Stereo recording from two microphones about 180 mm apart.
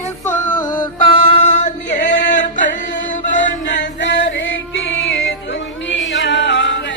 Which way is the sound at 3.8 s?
80° left.